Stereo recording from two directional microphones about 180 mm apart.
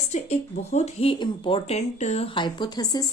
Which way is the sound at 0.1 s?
35° left (ahead or behind).